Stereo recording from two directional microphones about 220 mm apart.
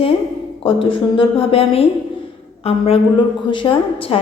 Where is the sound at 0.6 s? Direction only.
25° left (ahead or behind).